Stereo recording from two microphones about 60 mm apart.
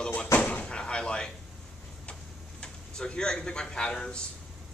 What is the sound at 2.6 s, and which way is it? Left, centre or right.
Speech, centre.